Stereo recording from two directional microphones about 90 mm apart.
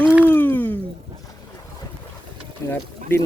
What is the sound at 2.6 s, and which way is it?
Speech, 30° left (ahead or behind).